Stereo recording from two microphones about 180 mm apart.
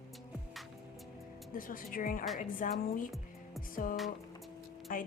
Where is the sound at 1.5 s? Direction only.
50° left (ahead or behind).